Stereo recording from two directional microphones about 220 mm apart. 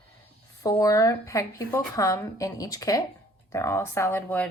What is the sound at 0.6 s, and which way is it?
A woman's voice, 15° left (ahead or behind).